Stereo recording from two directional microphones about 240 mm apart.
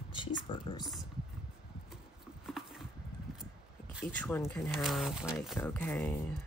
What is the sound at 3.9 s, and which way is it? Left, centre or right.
Speech, centre.